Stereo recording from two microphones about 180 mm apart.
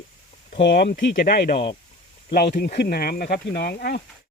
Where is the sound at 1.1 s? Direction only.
50° left (ahead or behind).